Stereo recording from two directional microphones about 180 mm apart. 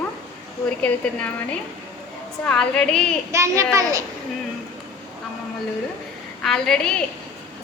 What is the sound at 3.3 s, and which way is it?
Speech, 15° right (ahead or behind).